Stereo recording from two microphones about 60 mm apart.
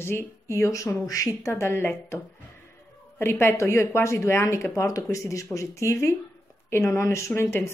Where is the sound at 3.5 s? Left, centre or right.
Left.